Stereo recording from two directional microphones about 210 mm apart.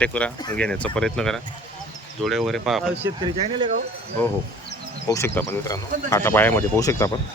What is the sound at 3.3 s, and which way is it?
Speech, 30° right (ahead or behind).